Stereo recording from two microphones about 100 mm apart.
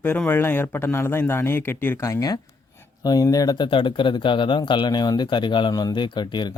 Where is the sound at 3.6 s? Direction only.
55° left (ahead or behind).